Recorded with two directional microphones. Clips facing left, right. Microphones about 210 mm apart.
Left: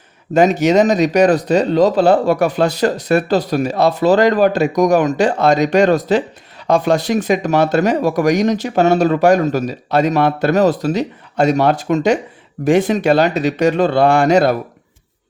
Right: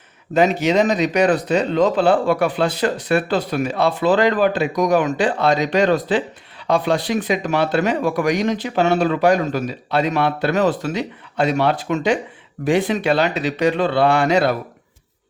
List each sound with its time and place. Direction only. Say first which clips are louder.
0.3 s speech: left 4 dB; 45° left (ahead or behind)